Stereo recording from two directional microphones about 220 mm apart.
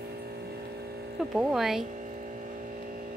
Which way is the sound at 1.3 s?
Centre (ahead or behind).